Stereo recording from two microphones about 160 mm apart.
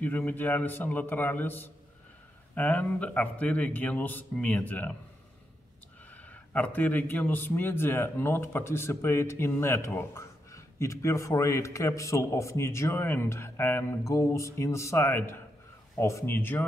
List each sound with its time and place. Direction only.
0.0 s a man's voice: 10° left (ahead or behind)
6.3 s a man's voice: 10° left (ahead or behind)